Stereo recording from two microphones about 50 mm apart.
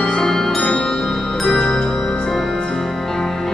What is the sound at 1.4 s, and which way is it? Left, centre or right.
Music, centre.